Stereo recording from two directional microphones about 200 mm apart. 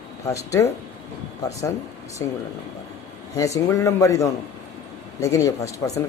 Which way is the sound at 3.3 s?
15° left (ahead or behind).